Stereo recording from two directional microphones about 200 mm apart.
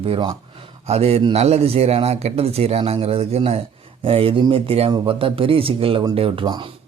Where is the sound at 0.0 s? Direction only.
25° right (ahead or behind).